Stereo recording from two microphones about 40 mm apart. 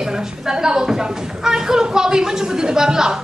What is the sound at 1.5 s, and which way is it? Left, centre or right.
A man's voice, centre.